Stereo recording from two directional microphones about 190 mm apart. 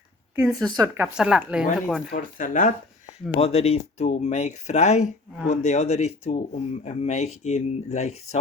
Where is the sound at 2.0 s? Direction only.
45° left (ahead or behind).